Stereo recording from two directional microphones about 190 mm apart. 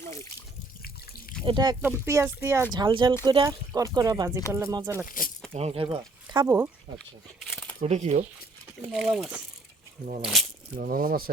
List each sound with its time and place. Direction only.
1.5 s speech: 20° right (ahead or behind)
5.0 s speech: 45° left (ahead or behind)
5.5 s speech: 30° right (ahead or behind); by 6.7 s 15° right (ahead or behind)
7.5 s a sound: 10° left (ahead or behind)
7.8 s speech: 35° right (ahead or behind)
8.9 s speech: centre (ahead or behind)
10.8 s speech: 50° right (ahead or behind)